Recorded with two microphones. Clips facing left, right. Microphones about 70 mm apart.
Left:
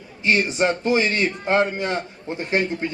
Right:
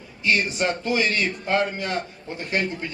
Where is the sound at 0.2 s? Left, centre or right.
Left.